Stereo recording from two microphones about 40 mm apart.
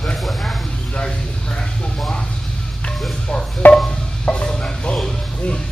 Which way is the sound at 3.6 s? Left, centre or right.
Left.